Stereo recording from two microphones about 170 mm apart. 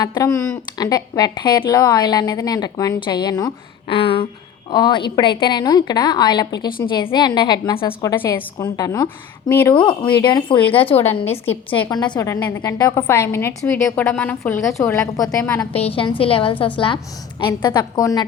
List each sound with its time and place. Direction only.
0.0 s speech: 20° left (ahead or behind)
8.2 s a woman's voice: 15° left (ahead or behind)
9.7 s a woman's voice: 30° left (ahead or behind)
15.7 s a woman's voice: 35° left (ahead or behind)